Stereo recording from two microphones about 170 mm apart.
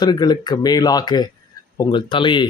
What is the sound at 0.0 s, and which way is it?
Speech, 25° left (ahead or behind).